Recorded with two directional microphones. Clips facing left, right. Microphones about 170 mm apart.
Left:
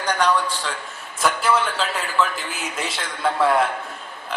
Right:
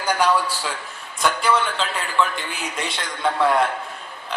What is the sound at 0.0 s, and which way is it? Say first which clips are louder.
A man's voice: right 1 dB; 10° right (ahead or behind).